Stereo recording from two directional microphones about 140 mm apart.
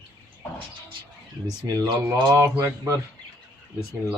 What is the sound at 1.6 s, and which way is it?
Speech, 30° right (ahead or behind).